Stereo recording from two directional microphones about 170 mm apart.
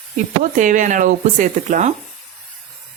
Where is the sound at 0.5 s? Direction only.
50° right (ahead or behind).